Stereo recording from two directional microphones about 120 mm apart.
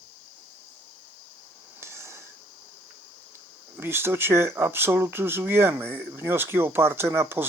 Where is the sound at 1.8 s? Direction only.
20° right (ahead or behind).